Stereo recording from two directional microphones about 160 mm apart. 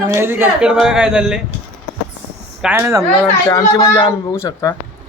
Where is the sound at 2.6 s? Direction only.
15° right (ahead or behind).